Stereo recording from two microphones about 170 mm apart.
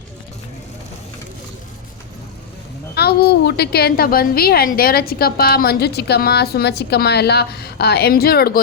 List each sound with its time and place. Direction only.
2.9 s a woman's voice: 70° left (ahead or behind)